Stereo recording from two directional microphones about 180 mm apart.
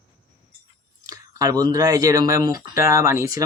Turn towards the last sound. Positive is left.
turn(degrees=-15)  # may be behind; listen again after turning